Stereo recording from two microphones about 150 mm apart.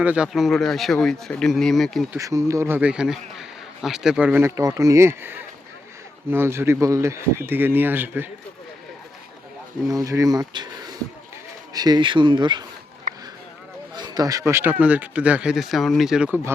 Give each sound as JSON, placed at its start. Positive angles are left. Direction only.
{"t": 0.0, "sound": "speech", "side_deg": -10}
{"t": 2.1, "sound": "a man's voice", "side_deg": -20}
{"t": 9.9, "sound": "speech", "side_deg": -20}
{"t": 13.1, "sound": "a sound", "side_deg": -55}
{"t": 13.9, "sound": "a man's voice", "side_deg": -25}